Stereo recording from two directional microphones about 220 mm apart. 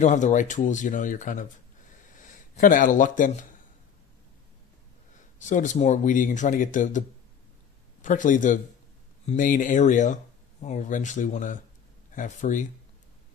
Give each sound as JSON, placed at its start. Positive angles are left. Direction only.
{"t": 0.0, "sound": "speech", "side_deg": 35}
{"t": 5.4, "sound": "speech", "side_deg": 35}